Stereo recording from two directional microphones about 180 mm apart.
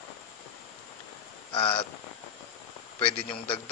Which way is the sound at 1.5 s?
30° left (ahead or behind).